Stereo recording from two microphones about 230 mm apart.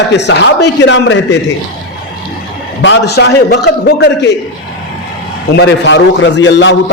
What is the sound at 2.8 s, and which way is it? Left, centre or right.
A man's voice, left.